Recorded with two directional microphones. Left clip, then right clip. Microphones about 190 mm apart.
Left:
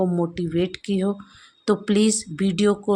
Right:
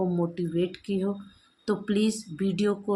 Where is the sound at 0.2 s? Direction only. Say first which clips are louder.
Left 4 dB; 40° left (ahead or behind).